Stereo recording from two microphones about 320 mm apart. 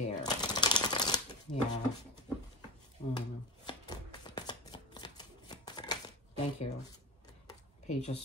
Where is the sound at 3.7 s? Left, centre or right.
Centre.